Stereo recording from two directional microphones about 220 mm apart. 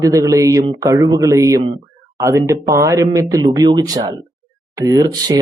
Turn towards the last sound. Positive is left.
turn(degrees=-15)  # may be behind; listen again after turning